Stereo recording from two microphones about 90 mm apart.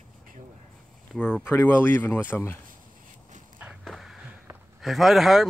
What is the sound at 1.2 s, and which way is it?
Speech, 20° left (ahead or behind).